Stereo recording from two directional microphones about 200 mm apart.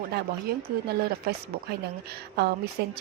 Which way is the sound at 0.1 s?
55° right (ahead or behind).